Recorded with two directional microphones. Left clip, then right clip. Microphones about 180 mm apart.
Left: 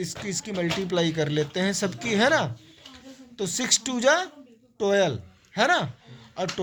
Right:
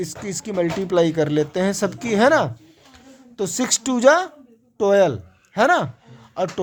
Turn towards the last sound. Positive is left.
turn(degrees=-65)  # may be behind; listen again after turning